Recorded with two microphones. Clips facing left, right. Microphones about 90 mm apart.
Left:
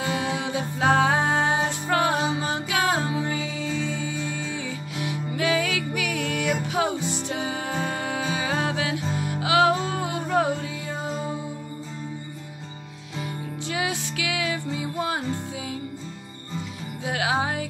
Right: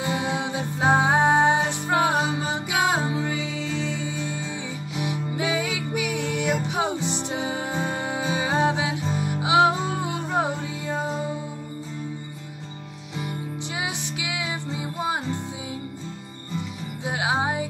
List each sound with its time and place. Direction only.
0.0 s music: 25° right (ahead or behind)
13.7 s music: 20° right (ahead or behind)
17.0 s music: 20° right (ahead or behind)